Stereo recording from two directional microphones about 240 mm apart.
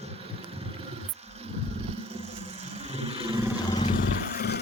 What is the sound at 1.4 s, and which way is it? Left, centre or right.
Vehicle, right.